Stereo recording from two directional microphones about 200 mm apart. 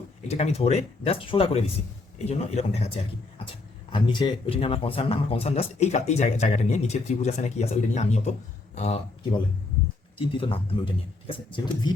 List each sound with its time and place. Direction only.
0.3 s speech: 35° left (ahead or behind)
3.9 s a man's voice: 25° left (ahead or behind)
10.2 s speech: 25° left (ahead or behind)